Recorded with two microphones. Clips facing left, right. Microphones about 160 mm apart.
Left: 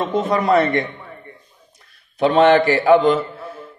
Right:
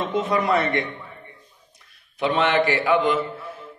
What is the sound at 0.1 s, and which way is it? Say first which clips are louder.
Speech: left 5 dB; 35° left (ahead or behind).